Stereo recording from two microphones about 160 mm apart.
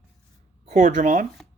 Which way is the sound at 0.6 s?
45° right (ahead or behind).